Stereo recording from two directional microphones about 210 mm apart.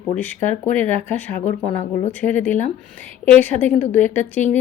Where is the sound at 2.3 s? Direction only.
10° left (ahead or behind).